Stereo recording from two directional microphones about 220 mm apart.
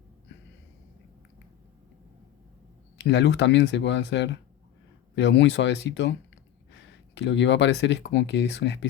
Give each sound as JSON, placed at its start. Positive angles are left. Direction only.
{"t": 3.0, "sound": "speech", "side_deg": 55}
{"t": 7.2, "sound": "speech", "side_deg": 55}